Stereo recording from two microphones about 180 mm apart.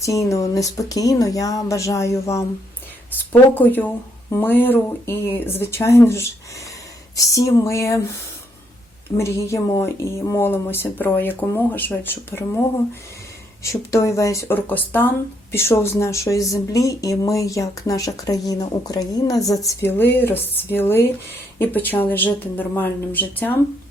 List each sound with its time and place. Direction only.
0.0 s speech: 15° left (ahead or behind)
7.3 s speech: 20° left (ahead or behind)
9.1 s speech: 15° left (ahead or behind)